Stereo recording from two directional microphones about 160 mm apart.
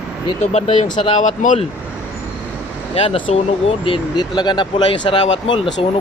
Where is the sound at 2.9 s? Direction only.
35° left (ahead or behind).